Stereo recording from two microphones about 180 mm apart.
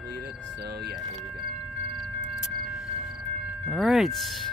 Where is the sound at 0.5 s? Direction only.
65° right (ahead or behind).